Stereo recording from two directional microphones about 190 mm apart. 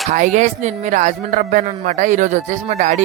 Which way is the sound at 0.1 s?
40° right (ahead or behind).